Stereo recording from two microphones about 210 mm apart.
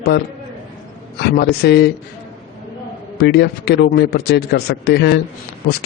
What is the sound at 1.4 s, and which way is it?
Speech, 50° left (ahead or behind).